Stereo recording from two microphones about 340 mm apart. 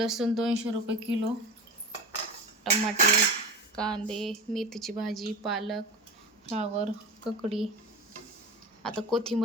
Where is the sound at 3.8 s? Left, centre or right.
Centre.